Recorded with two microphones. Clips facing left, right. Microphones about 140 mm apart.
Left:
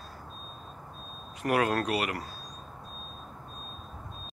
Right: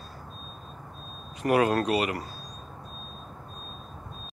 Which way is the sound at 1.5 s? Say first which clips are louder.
Right 4 dB; 15° right (ahead or behind).